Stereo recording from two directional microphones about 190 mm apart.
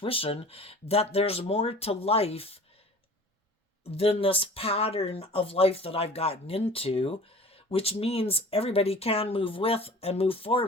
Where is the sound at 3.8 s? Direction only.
30° left (ahead or behind).